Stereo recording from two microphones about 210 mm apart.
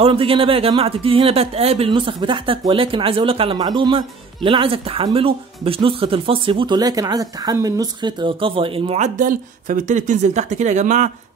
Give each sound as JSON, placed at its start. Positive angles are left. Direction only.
{"t": 0.0, "sound": "speech", "side_deg": -25}